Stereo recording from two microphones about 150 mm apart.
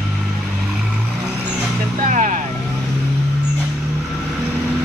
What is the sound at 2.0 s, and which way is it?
Vehicle, 55° right (ahead or behind).